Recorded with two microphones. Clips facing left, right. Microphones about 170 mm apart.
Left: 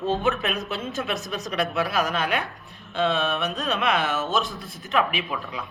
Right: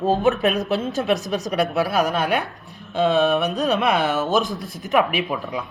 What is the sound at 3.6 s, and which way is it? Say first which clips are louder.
Speech: right 3 dB; 35° right (ahead or behind).